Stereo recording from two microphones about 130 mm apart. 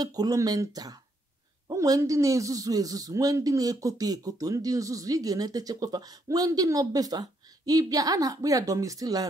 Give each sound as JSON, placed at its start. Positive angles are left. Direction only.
{"t": 0.0, "sound": "speech", "side_deg": -30}